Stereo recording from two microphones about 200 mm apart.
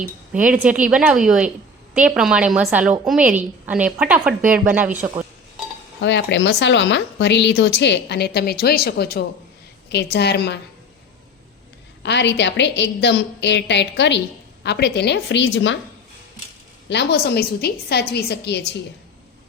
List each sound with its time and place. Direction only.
0.3 s a woman's voice: 5° right (ahead or behind)
6.0 s a woman's voice: 60° left (ahead or behind)
12.0 s a woman's voice: 60° left (ahead or behind)
16.9 s a woman's voice: 55° left (ahead or behind)